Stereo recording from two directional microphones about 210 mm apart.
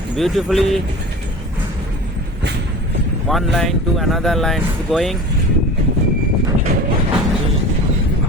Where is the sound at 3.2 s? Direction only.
Centre (ahead or behind).